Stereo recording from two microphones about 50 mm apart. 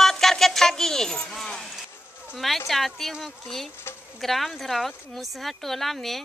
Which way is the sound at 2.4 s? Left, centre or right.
Centre.